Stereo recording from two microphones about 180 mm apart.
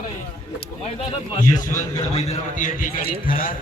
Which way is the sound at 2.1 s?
40° left (ahead or behind).